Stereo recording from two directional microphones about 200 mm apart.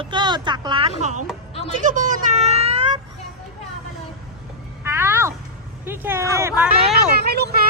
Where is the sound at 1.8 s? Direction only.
40° right (ahead or behind).